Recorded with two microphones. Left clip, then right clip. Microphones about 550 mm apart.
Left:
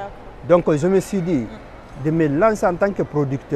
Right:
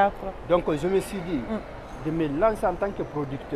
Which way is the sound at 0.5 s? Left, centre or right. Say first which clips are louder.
Left 8 dB; left.